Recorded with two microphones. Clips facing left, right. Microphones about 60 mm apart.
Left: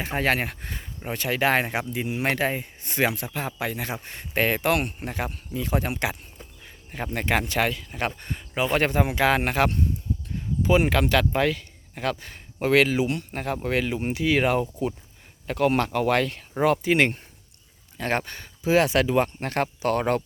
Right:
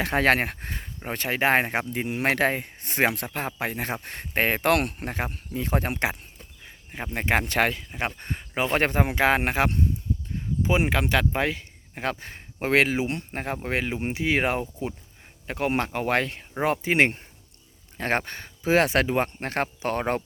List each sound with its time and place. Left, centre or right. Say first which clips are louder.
0.0 s speech: right 3 dB; right
1.9 s speech: right 1 dB; right
2.8 s speech: right 1 dB; right
4.0 s speech: right 2 dB; right
4.4 s speech: left 1 dB; right
4.6 s speech: right 1 dB; right
4.9 s speech: even; right
6.9 s speech: even; centre
7.4 s speech: right 1 dB; right
7.9 s speech: left 1 dB; centre
8.2 s speech: left 1 dB; right